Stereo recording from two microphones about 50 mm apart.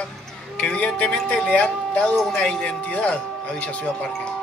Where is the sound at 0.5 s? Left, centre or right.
Left.